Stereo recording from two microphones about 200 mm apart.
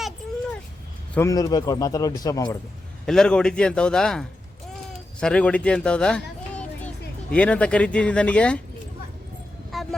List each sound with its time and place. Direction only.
1.1 s a man's voice: 15° left (ahead or behind)
3.1 s a man's voice: 5° left (ahead or behind)
9.7 s a sound: centre (ahead or behind)